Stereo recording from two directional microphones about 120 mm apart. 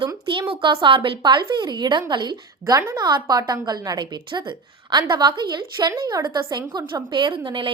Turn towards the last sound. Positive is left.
turn(degrees=-40)  # may be behind; listen again after turning